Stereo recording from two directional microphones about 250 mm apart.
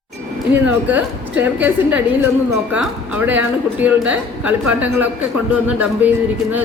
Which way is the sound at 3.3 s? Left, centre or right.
Centre.